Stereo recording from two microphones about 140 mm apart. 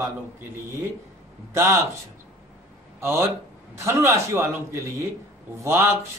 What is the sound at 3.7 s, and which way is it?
A man's voice, 20° right (ahead or behind).